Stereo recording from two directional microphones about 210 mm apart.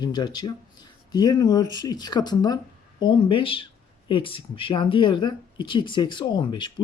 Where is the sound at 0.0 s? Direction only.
20° left (ahead or behind).